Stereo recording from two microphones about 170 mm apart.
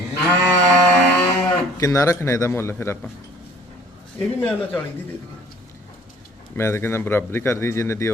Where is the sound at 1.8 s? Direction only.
20° left (ahead or behind).